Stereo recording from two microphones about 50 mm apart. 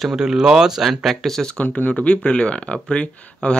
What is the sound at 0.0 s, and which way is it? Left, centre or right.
Speech, centre.